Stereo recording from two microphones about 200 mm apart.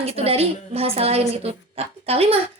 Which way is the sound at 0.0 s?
30° right (ahead or behind).